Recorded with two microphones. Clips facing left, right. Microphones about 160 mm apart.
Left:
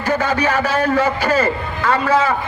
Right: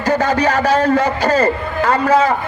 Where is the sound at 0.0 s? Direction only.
40° right (ahead or behind).